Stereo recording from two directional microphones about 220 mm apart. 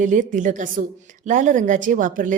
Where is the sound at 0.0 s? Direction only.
35° right (ahead or behind).